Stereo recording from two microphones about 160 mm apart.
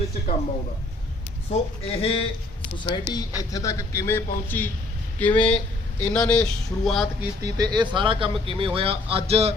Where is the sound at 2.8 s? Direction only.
30° left (ahead or behind); by 5.6 s 5° left (ahead or behind).